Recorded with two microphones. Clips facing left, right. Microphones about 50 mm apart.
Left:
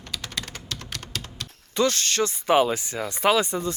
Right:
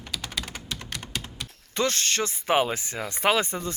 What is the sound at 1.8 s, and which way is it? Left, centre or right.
Speech, right.